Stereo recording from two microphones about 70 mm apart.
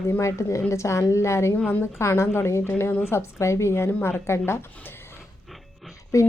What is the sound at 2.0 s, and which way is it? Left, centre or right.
A woman's voice, left.